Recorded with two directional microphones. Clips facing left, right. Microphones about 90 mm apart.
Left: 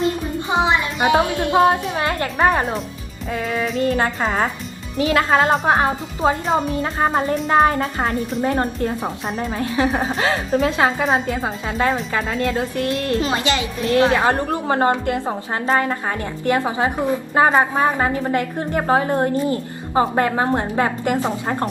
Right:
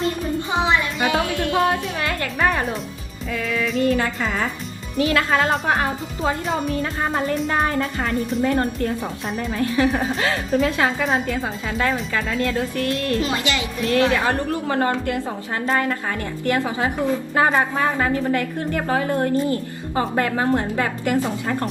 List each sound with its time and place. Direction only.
0.3 s music: 20° left (ahead or behind)
3.3 s speech: 35° left (ahead or behind)
4.9 s speech: 25° left (ahead or behind)
11.0 s speech: 35° left (ahead or behind)